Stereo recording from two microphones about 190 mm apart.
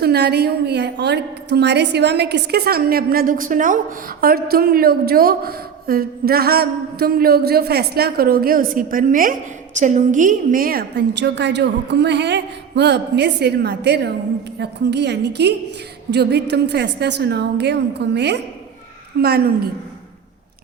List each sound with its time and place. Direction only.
0.0 s a woman's voice: 60° right (ahead or behind)